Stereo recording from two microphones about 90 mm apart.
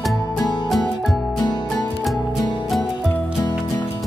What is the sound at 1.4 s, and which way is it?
Music, 55° left (ahead or behind).